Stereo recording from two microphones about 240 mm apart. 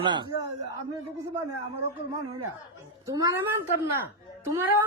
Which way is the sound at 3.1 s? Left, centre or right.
Centre.